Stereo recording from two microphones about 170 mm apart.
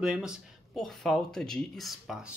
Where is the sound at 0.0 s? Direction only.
5° right (ahead or behind).